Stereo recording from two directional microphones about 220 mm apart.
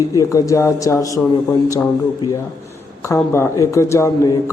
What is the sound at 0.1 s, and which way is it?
A man's voice, 15° left (ahead or behind).